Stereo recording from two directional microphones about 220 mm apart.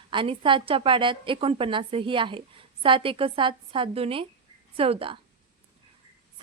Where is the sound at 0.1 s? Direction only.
20° right (ahead or behind).